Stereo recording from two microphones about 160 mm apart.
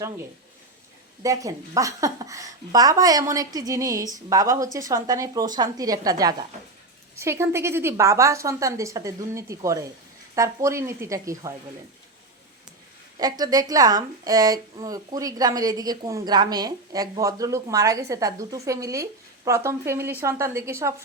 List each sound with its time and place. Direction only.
1.2 s a woman's voice: 20° right (ahead or behind)
13.1 s a woman's voice: 25° right (ahead or behind)